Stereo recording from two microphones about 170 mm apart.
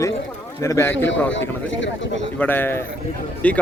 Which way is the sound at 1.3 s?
90° left.